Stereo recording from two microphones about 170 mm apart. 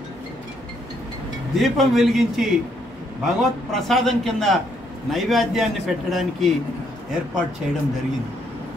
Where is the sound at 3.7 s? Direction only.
Centre (ahead or behind).